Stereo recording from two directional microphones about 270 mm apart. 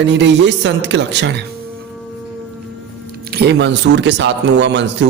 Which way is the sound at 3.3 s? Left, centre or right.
Right.